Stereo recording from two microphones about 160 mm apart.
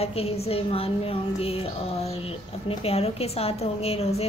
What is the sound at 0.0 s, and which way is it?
A woman's voice, 40° left (ahead or behind).